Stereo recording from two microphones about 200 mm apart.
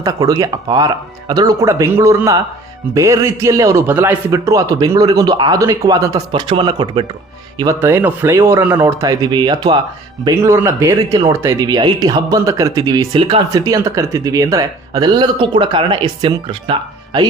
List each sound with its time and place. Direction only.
0.0 s a man's voice: 15° right (ahead or behind)